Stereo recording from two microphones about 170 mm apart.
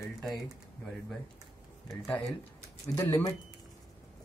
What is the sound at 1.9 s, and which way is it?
Speech, 5° left (ahead or behind).